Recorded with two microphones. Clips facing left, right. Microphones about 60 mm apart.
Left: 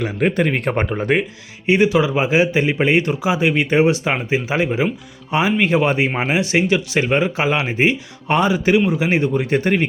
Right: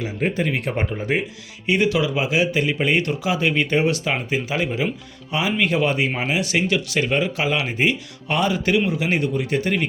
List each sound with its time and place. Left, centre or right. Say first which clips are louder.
0.0 s speech: left 5 dB; left
0.4 s speech: left 4 dB; left
0.9 s speech: left 5 dB; left
1.6 s speech: left 4 dB; left